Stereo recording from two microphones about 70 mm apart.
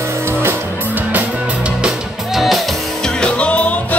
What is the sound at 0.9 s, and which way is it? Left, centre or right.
Music, right.